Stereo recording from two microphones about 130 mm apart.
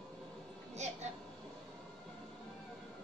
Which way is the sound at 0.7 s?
60° right (ahead or behind).